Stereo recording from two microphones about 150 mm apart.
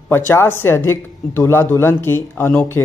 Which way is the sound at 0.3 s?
15° left (ahead or behind).